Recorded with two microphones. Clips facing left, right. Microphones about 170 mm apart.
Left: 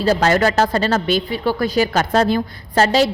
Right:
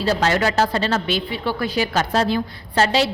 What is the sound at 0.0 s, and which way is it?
A woman's voice, 45° left (ahead or behind).